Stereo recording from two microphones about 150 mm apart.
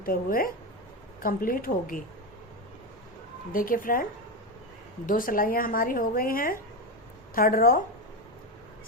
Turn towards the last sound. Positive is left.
turn(degrees=70)  # may be behind; listen again after turning